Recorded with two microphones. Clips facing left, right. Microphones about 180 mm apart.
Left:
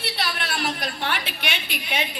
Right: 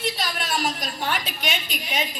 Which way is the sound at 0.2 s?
65° left (ahead or behind).